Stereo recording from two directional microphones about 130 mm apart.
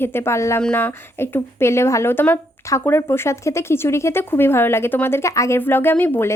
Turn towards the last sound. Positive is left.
turn(degrees=15)  # may be behind; listen again after turning